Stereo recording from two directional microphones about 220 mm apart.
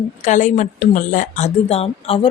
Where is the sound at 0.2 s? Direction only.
35° left (ahead or behind).